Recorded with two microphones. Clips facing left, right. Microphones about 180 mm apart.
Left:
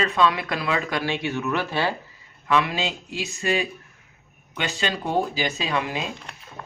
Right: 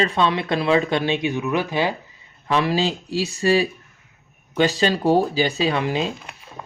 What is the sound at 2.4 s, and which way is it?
Speech, 35° right (ahead or behind).